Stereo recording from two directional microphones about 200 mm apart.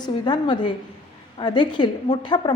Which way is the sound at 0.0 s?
20° left (ahead or behind).